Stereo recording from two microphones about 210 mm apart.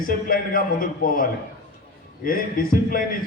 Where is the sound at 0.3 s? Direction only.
40° left (ahead or behind).